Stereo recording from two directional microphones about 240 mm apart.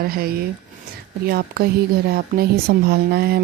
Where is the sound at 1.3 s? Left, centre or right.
Right.